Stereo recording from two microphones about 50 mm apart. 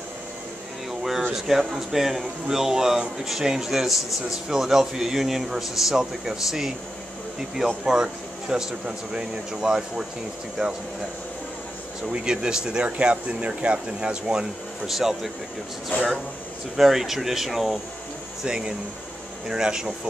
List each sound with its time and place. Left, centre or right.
1.3 s speech: centre
12.1 s speech: centre
14.9 s speech: centre
16.7 s speech: centre
18.4 s speech: centre